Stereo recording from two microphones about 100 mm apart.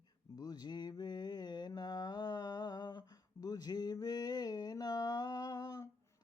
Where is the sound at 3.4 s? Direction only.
40° left (ahead or behind).